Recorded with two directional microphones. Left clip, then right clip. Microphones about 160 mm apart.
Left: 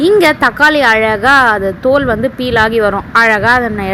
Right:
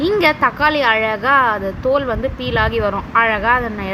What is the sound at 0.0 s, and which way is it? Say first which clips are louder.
A woman's voice: left 6 dB; 25° left (ahead or behind).